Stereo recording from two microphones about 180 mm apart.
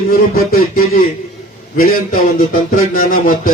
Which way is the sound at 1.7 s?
55° left (ahead or behind).